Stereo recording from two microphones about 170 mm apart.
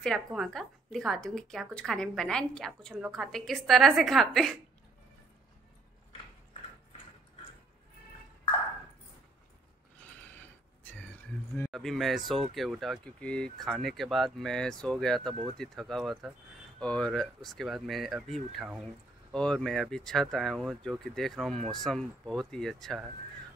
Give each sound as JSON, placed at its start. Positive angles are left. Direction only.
{"t": 0.0, "sound": "a woman's voice", "side_deg": 0}
{"t": 10.8, "sound": "a sound", "side_deg": 10}
{"t": 11.7, "sound": "a woman's voice", "side_deg": 0}